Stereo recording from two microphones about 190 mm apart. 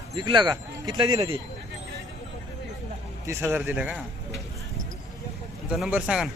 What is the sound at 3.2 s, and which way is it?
Speech, 10° right (ahead or behind).